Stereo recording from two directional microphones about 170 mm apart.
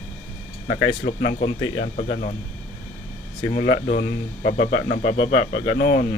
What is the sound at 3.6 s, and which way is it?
Speech, 75° left (ahead or behind).